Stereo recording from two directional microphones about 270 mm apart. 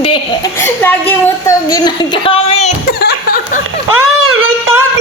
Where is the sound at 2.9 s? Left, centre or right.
Left.